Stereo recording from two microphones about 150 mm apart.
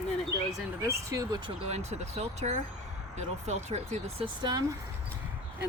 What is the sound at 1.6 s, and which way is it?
Speech, 45° right (ahead or behind).